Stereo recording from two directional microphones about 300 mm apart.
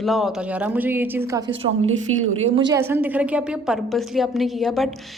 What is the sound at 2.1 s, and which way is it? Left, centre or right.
Speech, right.